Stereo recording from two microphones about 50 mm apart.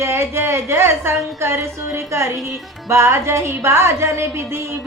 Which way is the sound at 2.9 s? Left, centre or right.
Right.